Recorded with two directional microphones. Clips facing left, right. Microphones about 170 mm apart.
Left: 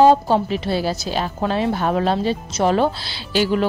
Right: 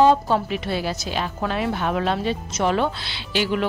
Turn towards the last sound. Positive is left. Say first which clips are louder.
# left 4 dB
turn(degrees=40)  # may be behind; listen again after turning